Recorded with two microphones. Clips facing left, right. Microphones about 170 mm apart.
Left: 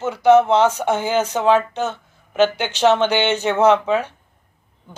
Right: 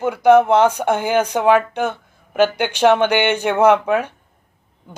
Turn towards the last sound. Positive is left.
turn(degrees=-10)  # may be behind; listen again after turning